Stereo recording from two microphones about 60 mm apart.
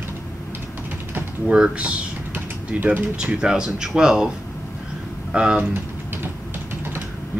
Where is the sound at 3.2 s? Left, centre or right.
Centre.